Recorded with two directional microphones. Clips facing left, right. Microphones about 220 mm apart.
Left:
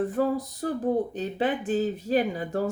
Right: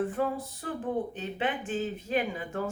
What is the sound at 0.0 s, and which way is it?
Speech, 40° left (ahead or behind).